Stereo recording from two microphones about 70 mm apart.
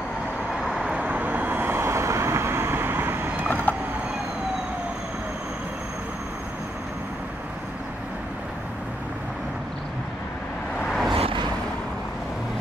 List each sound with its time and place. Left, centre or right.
0.6 s vehicle: centre; by 3.4 s right
3.7 s a sound: left
10.9 s vehicle: centre